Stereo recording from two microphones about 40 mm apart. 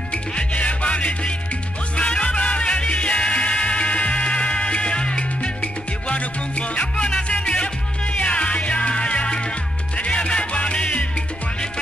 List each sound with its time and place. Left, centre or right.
0.1 s music: left